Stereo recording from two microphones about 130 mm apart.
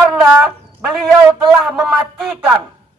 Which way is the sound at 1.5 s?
5° right (ahead or behind).